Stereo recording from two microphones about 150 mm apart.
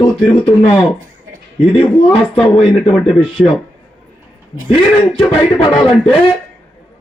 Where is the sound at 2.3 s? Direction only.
40° left (ahead or behind).